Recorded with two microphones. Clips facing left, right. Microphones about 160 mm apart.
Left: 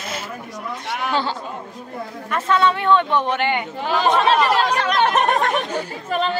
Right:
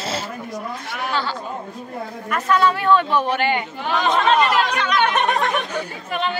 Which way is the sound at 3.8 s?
35° left (ahead or behind).